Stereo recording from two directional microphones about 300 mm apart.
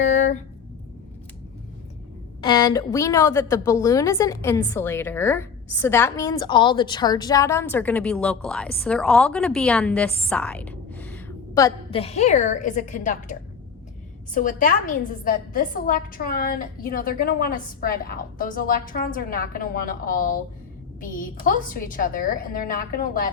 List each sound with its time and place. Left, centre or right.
0.0 s a sound: left
2.4 s a woman's voice: centre
14.3 s a woman's voice: left